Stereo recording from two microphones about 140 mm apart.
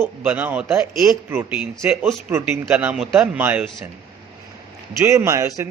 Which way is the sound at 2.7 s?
10° right (ahead or behind).